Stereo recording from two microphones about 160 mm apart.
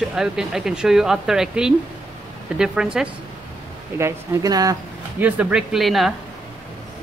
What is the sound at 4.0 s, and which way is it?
Speech, 20° right (ahead or behind).